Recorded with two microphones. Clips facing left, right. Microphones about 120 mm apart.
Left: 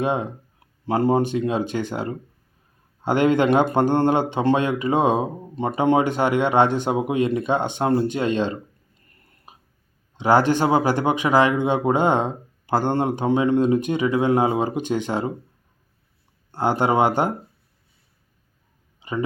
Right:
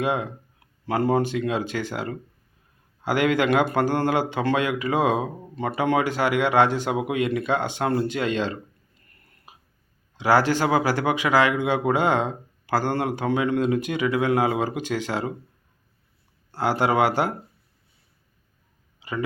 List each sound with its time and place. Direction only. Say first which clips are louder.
0.0 s speech: left 2 dB; 20° left (ahead or behind)
9.0 s a sound: left 2 dB; 25° left (ahead or behind)
10.2 s speech: left 2 dB; 20° left (ahead or behind)
16.5 s speech: left 2 dB; 20° left (ahead or behind)